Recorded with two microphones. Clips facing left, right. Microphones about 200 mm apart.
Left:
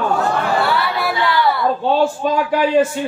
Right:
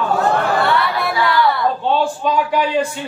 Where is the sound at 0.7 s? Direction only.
5° left (ahead or behind).